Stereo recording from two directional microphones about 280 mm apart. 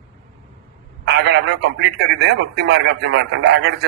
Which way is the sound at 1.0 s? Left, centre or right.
Right.